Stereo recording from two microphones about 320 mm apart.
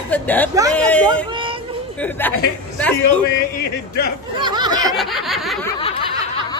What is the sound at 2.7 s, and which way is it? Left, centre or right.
Speech, centre.